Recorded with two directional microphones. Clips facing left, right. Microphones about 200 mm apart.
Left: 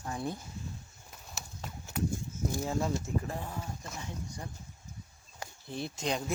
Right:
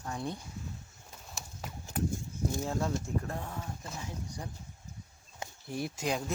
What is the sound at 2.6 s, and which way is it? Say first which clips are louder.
Speech: left 2 dB; 5° left (ahead or behind).